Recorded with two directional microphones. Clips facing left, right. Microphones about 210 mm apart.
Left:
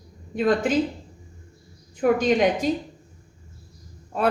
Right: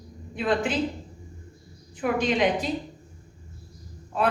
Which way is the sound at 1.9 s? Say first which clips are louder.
Left 5 dB; 40° left (ahead or behind).